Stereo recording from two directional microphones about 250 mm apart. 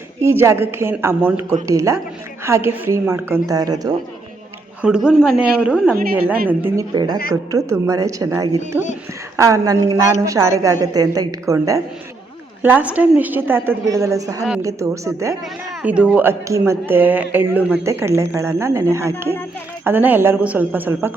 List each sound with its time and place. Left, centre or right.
0.2 s speech: centre
4.8 s speech: centre